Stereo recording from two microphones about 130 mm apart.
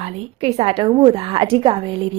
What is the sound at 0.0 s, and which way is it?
A woman's voice, 55° right (ahead or behind).